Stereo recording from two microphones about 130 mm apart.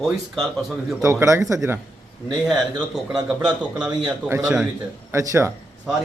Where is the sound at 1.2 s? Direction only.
25° right (ahead or behind).